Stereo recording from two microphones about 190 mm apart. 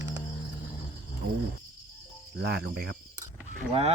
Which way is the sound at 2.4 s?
60° right (ahead or behind).